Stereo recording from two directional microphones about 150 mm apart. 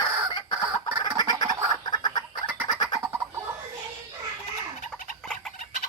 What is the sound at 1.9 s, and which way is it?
Chicken, 30° left (ahead or behind).